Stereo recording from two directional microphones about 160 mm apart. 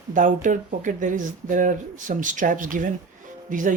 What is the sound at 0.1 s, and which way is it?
Speech, 55° right (ahead or behind).